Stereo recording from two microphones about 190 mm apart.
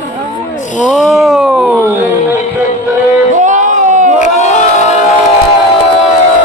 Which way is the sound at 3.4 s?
40° right (ahead or behind).